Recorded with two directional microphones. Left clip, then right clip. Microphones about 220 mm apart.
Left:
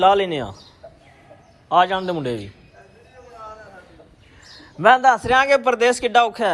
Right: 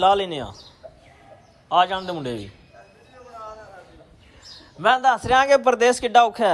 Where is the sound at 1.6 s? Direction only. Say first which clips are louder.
Left 2 dB; 15° right (ahead or behind).